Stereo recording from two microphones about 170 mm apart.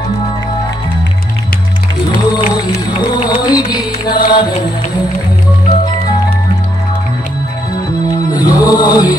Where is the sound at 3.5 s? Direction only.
25° left (ahead or behind).